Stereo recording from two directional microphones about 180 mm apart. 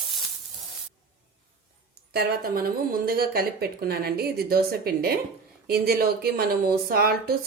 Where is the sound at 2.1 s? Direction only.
55° right (ahead or behind).